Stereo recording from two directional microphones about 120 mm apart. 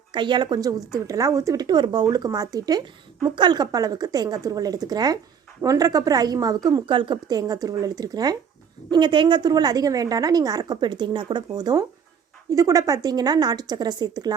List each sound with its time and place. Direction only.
0.1 s a woman's voice: 40° right (ahead or behind)